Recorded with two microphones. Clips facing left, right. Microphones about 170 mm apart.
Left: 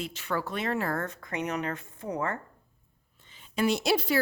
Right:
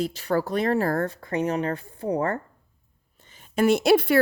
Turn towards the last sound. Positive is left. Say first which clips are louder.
# right 8 dB
turn(degrees=-60)  # may be behind; listen again after turning